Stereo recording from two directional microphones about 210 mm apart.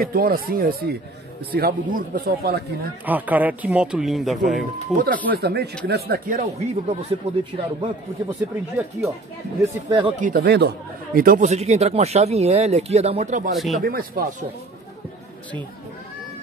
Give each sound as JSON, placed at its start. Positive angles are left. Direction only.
{"t": 0.0, "sound": "speech", "side_deg": -45}
{"t": 3.1, "sound": "speech", "side_deg": -10}
{"t": 4.9, "sound": "speech", "side_deg": -45}
{"t": 6.4, "sound": "speech", "side_deg": -30}
{"t": 8.4, "sound": "speech", "side_deg": -10}
{"t": 9.6, "sound": "speech", "side_deg": -20}
{"t": 10.2, "sound": "speech", "side_deg": -50}
{"t": 11.1, "sound": "speech", "side_deg": -40}
{"t": 13.6, "sound": "speech", "side_deg": 0}
{"t": 13.8, "sound": "speech", "side_deg": -45}